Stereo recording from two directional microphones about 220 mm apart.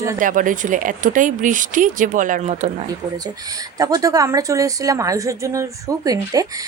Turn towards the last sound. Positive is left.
turn(degrees=-15)  # may be behind; listen again after turning